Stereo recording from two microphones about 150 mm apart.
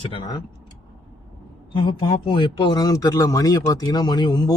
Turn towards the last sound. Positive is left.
turn(degrees=30)  # may be behind; listen again after turning